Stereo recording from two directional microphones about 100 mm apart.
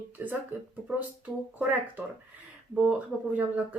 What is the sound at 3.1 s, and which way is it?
Speech, 5° right (ahead or behind).